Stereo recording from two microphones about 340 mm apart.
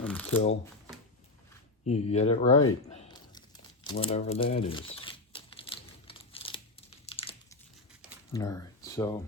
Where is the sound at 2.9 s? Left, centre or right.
Centre.